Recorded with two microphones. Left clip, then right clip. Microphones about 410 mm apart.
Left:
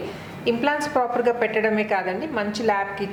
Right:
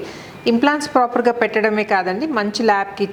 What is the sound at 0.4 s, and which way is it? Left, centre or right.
A woman's voice, right.